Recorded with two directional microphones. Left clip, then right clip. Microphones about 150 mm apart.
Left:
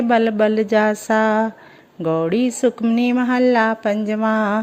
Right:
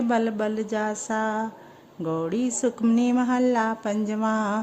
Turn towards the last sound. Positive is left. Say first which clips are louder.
# left 7 dB
turn(degrees=20)  # may be behind; listen again after turning